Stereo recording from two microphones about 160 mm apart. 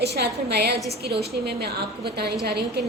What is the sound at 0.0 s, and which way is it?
A woman's voice, 90° right.